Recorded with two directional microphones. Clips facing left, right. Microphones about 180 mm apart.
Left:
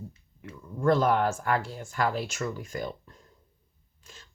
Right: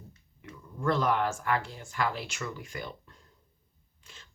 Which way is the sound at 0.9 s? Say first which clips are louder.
Left 4 dB; 45° left (ahead or behind).